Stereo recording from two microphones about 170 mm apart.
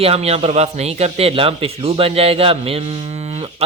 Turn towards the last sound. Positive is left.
turn(degrees=-40)  # may be behind; listen again after turning